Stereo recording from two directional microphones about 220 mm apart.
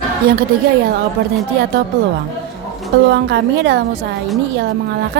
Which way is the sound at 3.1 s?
50° right (ahead or behind).